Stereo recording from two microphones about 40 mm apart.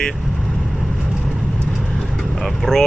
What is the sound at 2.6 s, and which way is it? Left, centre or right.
Speech, centre.